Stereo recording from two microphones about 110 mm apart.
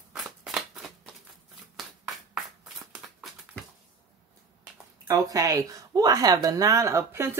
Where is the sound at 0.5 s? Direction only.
5° right (ahead or behind).